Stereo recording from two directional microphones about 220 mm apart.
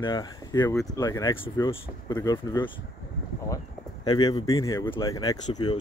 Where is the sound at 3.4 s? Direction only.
15° left (ahead or behind).